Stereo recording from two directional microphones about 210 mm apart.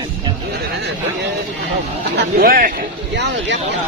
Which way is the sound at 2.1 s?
50° right (ahead or behind).